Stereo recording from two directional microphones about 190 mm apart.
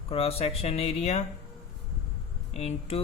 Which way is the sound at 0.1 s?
30° left (ahead or behind).